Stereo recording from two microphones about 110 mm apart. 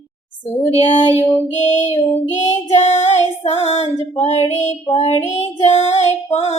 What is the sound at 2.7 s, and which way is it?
Female singing, 80° left.